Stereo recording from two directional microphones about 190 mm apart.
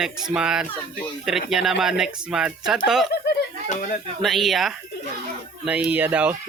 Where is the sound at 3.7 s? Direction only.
45° left (ahead or behind).